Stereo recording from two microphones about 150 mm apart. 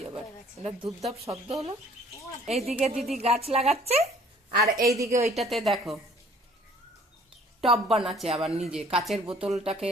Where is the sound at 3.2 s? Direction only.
45° right (ahead or behind).